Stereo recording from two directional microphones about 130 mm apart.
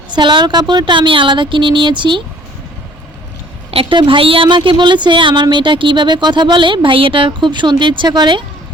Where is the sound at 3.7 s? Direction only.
45° right (ahead or behind).